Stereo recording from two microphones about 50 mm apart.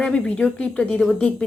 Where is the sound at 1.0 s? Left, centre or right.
Centre.